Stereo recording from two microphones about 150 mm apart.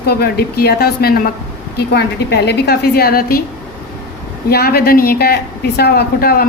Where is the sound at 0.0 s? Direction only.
90° left.